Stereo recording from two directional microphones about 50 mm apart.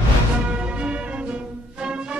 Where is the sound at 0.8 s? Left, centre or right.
Right.